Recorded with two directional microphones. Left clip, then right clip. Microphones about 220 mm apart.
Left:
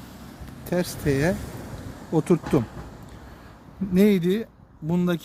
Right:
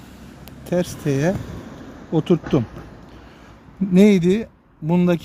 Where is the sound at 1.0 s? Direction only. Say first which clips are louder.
Right 2 dB; 40° right (ahead or behind).